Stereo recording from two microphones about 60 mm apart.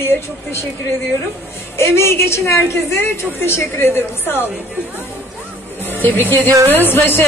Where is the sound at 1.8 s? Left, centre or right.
Left.